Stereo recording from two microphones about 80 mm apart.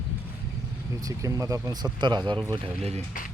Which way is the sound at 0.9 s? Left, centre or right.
Right.